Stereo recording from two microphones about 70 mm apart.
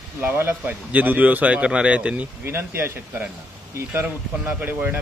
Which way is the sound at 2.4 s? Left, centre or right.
Right.